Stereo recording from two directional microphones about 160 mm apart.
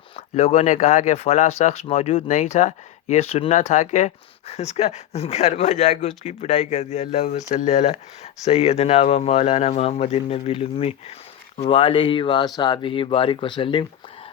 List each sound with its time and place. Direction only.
0.2 s speech: 40° left (ahead or behind)